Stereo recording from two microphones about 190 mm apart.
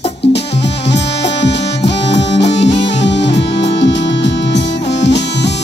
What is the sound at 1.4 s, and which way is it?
Music, 65° left (ahead or behind).